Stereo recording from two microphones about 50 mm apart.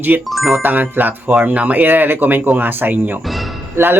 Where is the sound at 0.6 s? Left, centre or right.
Right.